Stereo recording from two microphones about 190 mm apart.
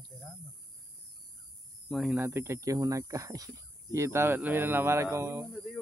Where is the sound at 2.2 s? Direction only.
10° right (ahead or behind).